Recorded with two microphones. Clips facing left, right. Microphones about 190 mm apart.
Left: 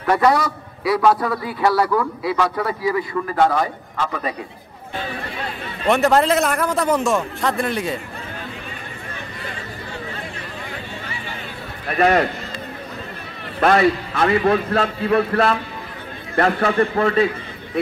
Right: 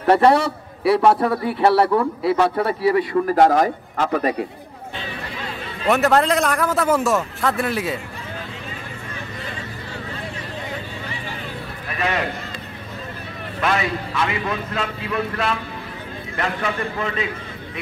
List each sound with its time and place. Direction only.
0.0 s a man's voice: 30° right (ahead or behind); by 4.4 s 45° right (ahead or behind)
5.9 s a man's voice: centre (ahead or behind)
11.9 s a man's voice: 40° left (ahead or behind)
13.6 s a man's voice: 40° left (ahead or behind)